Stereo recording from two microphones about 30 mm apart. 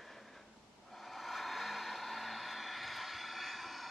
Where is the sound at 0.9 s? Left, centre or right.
Centre.